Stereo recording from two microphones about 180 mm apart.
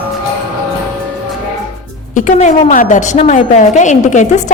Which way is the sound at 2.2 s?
40° left (ahead or behind).